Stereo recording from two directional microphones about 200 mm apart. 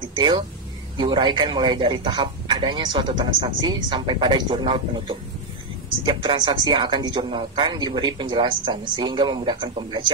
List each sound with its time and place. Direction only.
0.1 s a man's voice: 25° right (ahead or behind)